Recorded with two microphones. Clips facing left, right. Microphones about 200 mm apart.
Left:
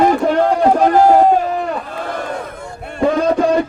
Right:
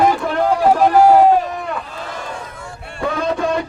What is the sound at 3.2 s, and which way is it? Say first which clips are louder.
Music: left 4 dB; 40° left (ahead or behind).